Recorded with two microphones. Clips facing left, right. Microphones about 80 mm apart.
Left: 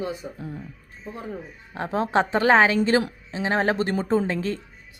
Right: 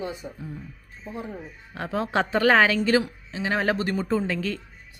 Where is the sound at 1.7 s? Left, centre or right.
Left.